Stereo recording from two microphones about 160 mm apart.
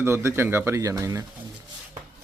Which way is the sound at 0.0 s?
15° right (ahead or behind).